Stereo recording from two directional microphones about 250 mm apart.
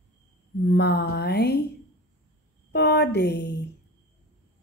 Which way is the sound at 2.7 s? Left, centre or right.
Left.